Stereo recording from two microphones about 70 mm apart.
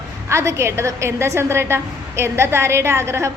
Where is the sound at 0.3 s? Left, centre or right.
Right.